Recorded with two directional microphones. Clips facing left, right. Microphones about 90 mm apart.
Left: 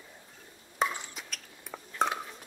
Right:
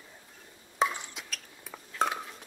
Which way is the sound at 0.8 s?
Centre (ahead or behind).